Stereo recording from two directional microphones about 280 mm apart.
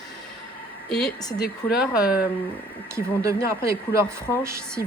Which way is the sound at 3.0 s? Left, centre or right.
Centre.